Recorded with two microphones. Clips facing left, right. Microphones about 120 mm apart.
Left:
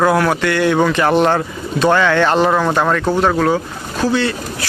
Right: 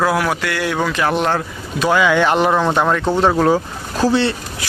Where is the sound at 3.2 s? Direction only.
25° right (ahead or behind).